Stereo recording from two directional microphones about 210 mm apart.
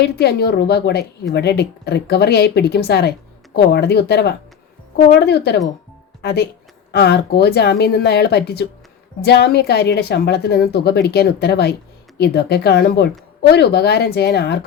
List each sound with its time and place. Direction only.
0.0 s a woman's voice: 50° left (ahead or behind)